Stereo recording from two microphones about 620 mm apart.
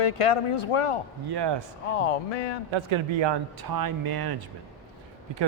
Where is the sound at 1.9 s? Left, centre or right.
Left.